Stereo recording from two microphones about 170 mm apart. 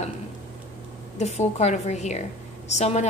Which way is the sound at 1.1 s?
40° left (ahead or behind).